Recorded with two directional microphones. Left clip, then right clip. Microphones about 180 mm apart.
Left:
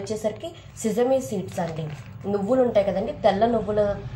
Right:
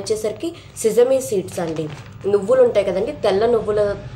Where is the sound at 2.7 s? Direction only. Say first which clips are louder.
Right 3 dB; 45° right (ahead or behind).